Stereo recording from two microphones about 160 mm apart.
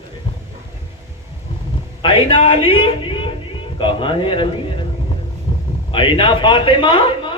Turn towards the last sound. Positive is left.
turn(degrees=30)  # may be behind; listen again after turning